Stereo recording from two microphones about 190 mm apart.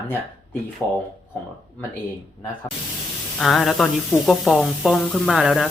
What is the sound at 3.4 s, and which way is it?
Speech, centre (ahead or behind).